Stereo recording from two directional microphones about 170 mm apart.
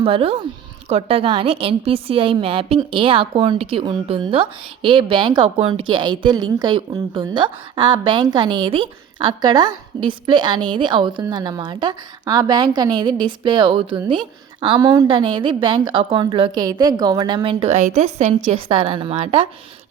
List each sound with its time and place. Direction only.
0.0 s a woman's voice: 35° right (ahead or behind)